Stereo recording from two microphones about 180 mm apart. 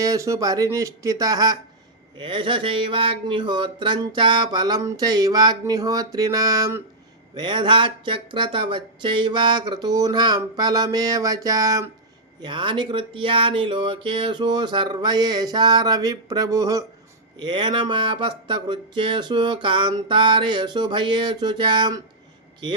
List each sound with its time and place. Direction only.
0.0 s speech: 20° right (ahead or behind)